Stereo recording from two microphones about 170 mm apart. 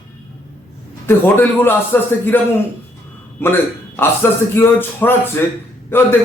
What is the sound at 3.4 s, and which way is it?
A man's voice, 15° left (ahead or behind).